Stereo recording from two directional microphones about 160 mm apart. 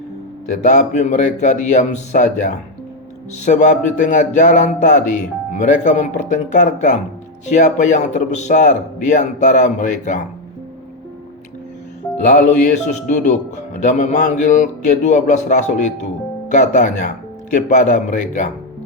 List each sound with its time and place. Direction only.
0.4 s speech: 50° left (ahead or behind)
12.3 s speech: 55° left (ahead or behind)